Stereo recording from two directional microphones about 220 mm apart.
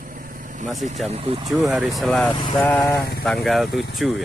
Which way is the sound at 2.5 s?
5° left (ahead or behind).